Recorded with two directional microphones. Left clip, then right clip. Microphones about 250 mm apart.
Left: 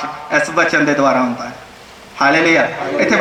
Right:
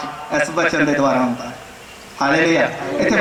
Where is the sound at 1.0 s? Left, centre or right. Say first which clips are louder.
Left 3 dB; left.